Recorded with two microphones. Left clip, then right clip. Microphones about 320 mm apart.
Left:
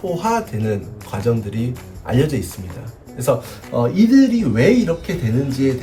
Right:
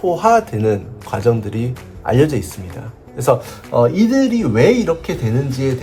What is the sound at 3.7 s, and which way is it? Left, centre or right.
Speech, centre.